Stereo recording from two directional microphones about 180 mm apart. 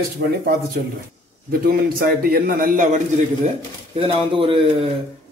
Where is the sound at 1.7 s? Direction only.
55° right (ahead or behind).